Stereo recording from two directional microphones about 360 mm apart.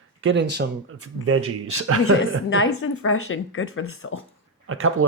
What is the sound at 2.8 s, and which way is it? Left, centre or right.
Speech, left.